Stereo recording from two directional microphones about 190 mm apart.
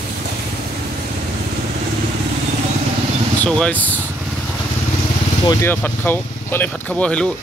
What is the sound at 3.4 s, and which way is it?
Speech, 5° left (ahead or behind).